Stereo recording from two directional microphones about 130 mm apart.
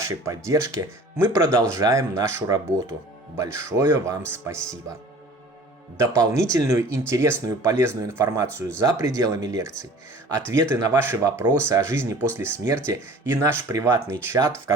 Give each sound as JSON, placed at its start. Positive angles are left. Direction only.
{"t": 0.0, "sound": "speech", "side_deg": -25}
{"t": 6.0, "sound": "speech", "side_deg": -25}